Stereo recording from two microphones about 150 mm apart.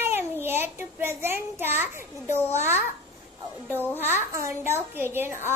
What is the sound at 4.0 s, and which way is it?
A child's voice, 15° right (ahead or behind).